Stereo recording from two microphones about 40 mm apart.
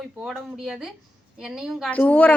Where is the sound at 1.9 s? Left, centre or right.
Left.